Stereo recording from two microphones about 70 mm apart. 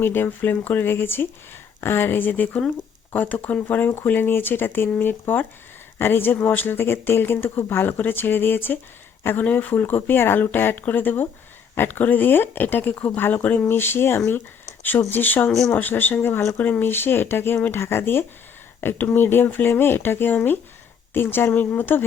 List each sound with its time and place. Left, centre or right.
0.0 s speech: left